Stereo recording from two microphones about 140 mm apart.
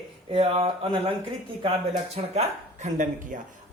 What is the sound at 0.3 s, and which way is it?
Speech, 40° right (ahead or behind).